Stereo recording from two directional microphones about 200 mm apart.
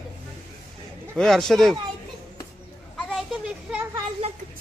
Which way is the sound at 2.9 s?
Centre (ahead or behind).